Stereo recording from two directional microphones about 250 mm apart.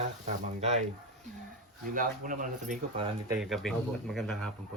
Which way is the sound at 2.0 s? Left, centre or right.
Right.